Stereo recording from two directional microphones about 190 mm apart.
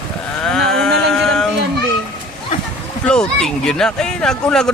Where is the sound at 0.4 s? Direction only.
5° left (ahead or behind).